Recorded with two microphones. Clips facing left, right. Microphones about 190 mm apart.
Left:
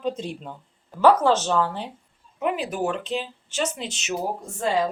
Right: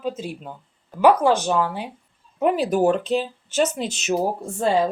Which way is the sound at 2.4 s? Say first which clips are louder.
Right 6 dB; 40° right (ahead or behind).